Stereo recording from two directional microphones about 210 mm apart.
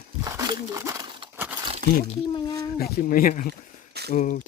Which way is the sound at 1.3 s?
10° right (ahead or behind).